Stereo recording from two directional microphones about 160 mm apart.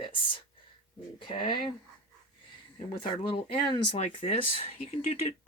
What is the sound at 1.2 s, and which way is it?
Speech, 30° left (ahead or behind).